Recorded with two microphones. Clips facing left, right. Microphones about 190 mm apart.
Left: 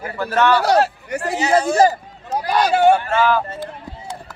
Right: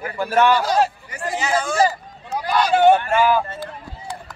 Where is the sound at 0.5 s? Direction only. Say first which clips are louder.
Left 3 dB; 70° left (ahead or behind).